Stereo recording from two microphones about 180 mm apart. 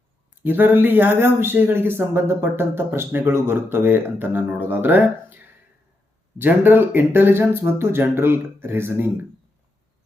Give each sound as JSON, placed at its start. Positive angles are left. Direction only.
{"t": 0.4, "sound": "speech", "side_deg": -10}
{"t": 6.4, "sound": "speech", "side_deg": -10}